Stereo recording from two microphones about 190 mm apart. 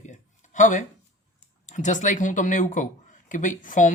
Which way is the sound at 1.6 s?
40° left (ahead or behind).